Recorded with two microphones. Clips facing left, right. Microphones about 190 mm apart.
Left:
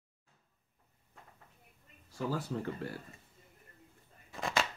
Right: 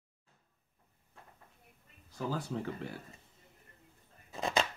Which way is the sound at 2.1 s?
5° left (ahead or behind).